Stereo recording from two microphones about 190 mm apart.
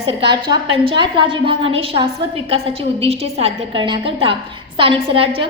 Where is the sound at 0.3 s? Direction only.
25° right (ahead or behind).